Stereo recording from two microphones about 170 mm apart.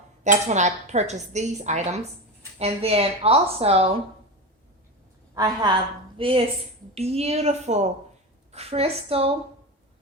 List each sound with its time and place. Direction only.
0.3 s speech: 45° right (ahead or behind)
5.3 s a woman's voice: 20° right (ahead or behind)
6.1 s speech: 30° right (ahead or behind)